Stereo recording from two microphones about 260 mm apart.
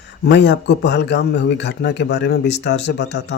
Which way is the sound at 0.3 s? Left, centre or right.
Left.